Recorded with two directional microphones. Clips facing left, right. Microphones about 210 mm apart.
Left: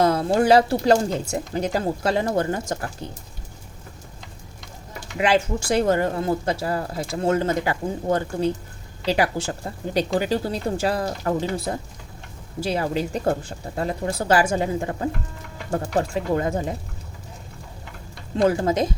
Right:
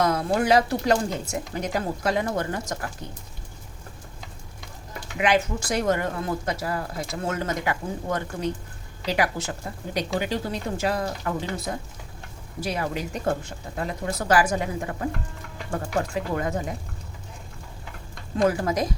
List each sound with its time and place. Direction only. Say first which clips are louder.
0.0 s speech: left 4 dB; 30° left (ahead or behind)
5.1 s speech: left 2 dB; 30° left (ahead or behind)
18.4 s speech: left 3 dB; 25° left (ahead or behind)